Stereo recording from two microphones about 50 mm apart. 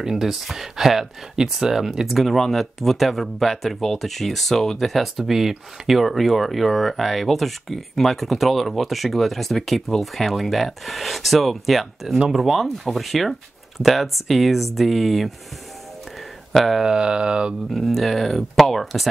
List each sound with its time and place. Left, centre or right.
0.0 s speech: centre
16.5 s speech: centre
16.8 s speech: centre
17.7 s speech: centre